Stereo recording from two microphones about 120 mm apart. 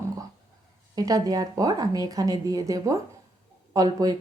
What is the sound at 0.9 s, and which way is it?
A woman's voice, 30° right (ahead or behind).